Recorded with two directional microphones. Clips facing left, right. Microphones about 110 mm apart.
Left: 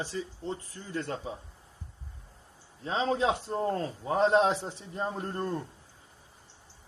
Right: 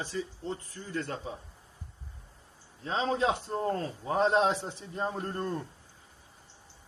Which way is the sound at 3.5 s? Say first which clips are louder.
Left 1 dB; 30° left (ahead or behind).